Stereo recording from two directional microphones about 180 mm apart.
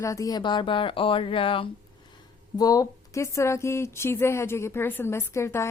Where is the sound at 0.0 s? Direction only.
15° left (ahead or behind).